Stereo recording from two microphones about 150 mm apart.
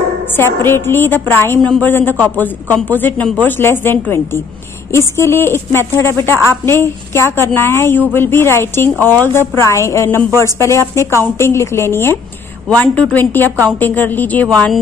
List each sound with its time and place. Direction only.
0.4 s a woman's voice: 15° left (ahead or behind)